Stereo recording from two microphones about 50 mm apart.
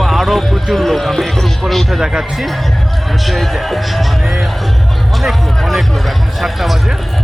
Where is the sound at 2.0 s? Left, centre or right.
Centre.